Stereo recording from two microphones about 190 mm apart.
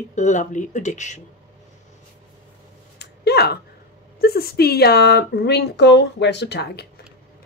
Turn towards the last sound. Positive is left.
turn(degrees=60)  # may be behind; listen again after turning